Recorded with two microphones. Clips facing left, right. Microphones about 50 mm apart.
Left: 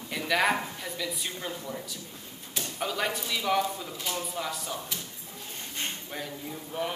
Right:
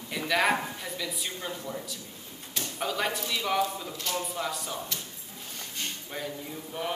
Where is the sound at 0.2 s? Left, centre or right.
Centre.